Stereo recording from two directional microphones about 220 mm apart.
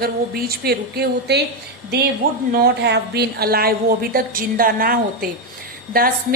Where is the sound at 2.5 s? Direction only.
45° right (ahead or behind).